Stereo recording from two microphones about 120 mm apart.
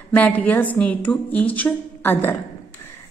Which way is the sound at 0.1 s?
15° left (ahead or behind).